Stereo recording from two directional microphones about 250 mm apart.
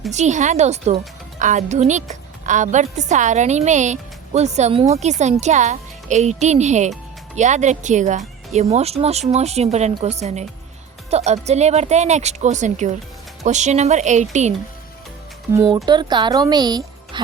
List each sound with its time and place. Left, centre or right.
0.1 s a woman's voice: right
15.5 s speech: centre